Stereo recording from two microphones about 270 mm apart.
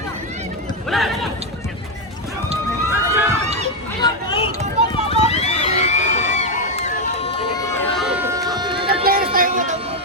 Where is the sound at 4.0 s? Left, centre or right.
Centre.